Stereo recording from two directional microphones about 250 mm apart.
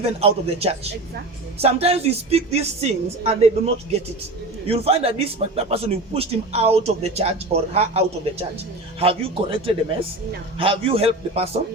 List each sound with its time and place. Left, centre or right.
0.0 s speech: right
4.6 s speech: right